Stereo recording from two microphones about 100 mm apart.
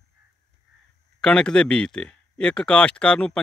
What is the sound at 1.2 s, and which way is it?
Speech, 10° left (ahead or behind).